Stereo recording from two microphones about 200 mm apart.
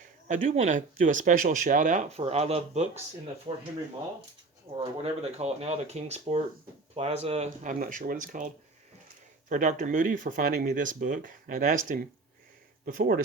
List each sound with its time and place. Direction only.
0.0 s speech: 35° right (ahead or behind)
4.7 s speech: 30° right (ahead or behind); by 13.2 s 45° right (ahead or behind)